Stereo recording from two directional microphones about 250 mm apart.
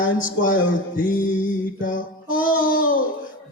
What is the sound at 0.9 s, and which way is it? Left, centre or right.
Music, left.